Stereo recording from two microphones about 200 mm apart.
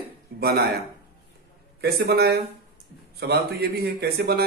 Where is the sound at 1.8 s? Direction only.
55° right (ahead or behind).